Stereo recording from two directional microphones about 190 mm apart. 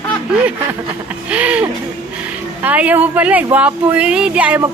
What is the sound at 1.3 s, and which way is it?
Speech, 5° right (ahead or behind).